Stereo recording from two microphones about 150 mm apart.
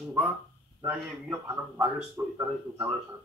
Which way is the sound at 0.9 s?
10° right (ahead or behind).